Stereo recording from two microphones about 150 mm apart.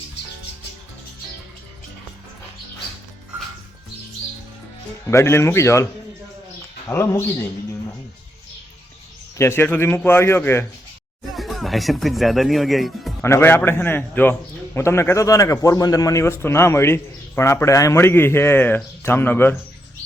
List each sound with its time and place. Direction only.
5.0 s a man's voice: 15° left (ahead or behind)
9.4 s a man's voice: 15° left (ahead or behind)
11.3 s speech: centre (ahead or behind)
13.2 s a man's voice: 15° left (ahead or behind)